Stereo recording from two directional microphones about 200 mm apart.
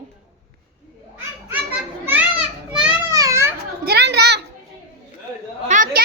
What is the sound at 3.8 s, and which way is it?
Speech, 55° right (ahead or behind).